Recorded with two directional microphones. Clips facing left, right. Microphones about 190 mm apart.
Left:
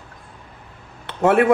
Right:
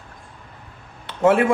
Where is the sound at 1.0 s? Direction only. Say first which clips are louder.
Even; 60° left (ahead or behind).